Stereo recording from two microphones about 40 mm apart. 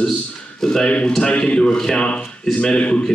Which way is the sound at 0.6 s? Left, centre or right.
Centre.